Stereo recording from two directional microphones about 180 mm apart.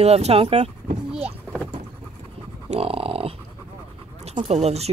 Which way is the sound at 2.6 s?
35° right (ahead or behind).